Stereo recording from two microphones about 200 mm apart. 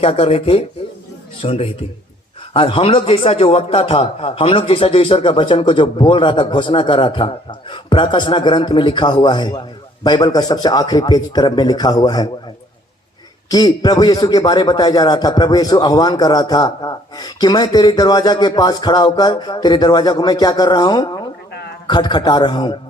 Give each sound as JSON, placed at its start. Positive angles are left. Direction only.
{"t": 0.0, "sound": "a man's voice", "side_deg": 30}
{"t": 13.5, "sound": "a man's voice", "side_deg": 20}